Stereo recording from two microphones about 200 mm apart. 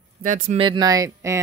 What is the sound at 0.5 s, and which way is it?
Speech, 25° right (ahead or behind).